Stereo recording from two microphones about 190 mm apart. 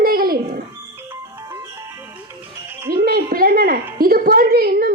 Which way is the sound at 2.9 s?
55° right (ahead or behind).